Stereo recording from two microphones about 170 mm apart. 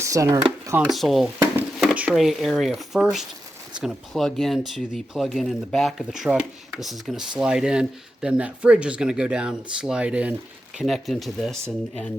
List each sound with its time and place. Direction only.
0.0 s speech: 20° right (ahead or behind)
0.8 s speech: centre (ahead or behind)